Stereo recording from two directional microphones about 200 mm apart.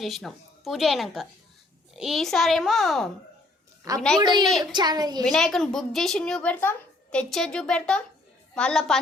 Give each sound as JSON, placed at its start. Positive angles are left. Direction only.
{"t": 0.0, "sound": "a woman's voice", "side_deg": 0}
{"t": 3.9, "sound": "a woman's voice", "side_deg": -15}
{"t": 5.2, "sound": "a woman's voice", "side_deg": 0}